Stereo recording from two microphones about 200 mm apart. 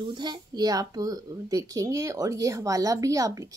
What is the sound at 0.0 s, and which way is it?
Speech, 20° right (ahead or behind).